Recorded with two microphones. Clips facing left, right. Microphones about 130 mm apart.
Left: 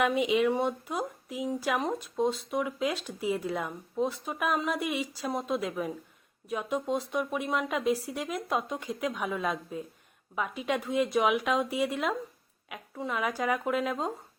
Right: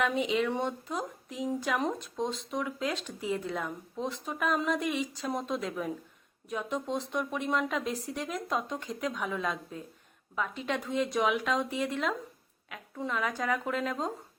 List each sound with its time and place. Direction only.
0.0 s speech: 10° left (ahead or behind)